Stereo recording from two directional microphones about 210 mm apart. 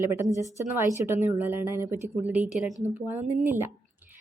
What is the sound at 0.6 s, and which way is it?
A woman's voice, 10° right (ahead or behind).